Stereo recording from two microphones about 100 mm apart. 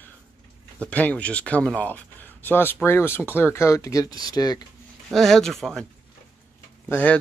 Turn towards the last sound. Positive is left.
turn(degrees=15)  # may be behind; listen again after turning